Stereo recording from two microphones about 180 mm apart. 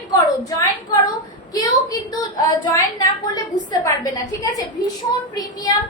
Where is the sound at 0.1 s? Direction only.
20° left (ahead or behind).